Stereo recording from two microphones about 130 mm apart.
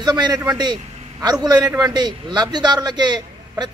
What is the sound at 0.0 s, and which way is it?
Speech, 30° right (ahead or behind).